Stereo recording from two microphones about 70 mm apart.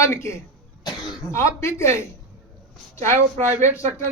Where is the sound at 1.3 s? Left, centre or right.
Left.